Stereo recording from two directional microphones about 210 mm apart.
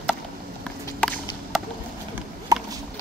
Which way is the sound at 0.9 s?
5° left (ahead or behind).